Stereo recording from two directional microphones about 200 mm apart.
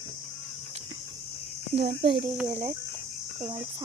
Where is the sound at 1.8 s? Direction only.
55° right (ahead or behind).